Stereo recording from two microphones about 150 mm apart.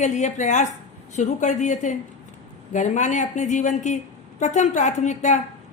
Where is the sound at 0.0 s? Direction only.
50° left (ahead or behind).